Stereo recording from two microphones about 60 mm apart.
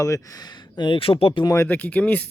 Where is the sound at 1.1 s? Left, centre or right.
Left.